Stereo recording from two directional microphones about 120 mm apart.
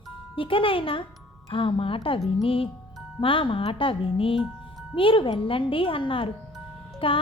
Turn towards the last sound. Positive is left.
turn(degrees=50)  # may be behind; listen again after turning